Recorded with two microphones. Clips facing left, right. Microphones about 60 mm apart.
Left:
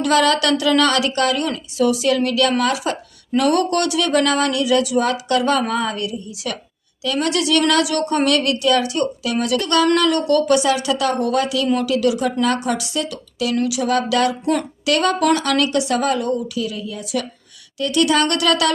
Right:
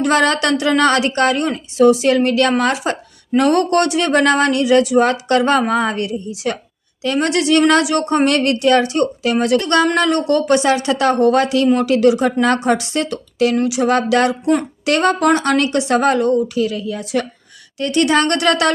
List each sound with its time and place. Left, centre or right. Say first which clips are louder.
0.0 s a woman's voice: right 1 dB; right